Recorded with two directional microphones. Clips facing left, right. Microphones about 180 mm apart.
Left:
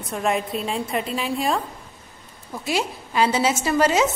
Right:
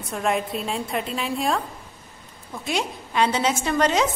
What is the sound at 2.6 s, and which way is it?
A woman's voice, 5° left (ahead or behind).